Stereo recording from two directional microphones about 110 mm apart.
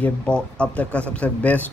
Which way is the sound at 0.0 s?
10° left (ahead or behind).